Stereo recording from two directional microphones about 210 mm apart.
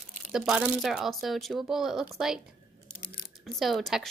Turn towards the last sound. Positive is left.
turn(degrees=0)  # may be behind; listen again after turning